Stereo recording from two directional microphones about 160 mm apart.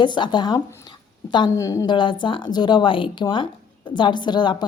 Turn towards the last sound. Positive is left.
turn(degrees=30)  # may be behind; listen again after turning